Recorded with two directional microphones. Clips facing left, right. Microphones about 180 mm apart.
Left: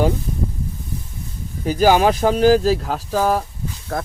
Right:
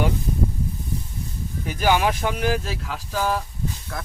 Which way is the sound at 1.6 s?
35° left (ahead or behind).